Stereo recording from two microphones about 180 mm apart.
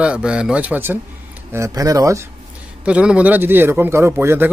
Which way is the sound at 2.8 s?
5° right (ahead or behind).